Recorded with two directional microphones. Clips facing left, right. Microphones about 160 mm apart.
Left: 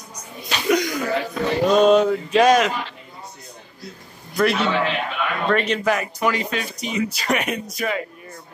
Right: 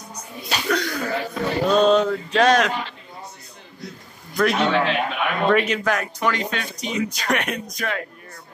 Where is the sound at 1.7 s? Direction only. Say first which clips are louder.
Left 2 dB; 10° left (ahead or behind).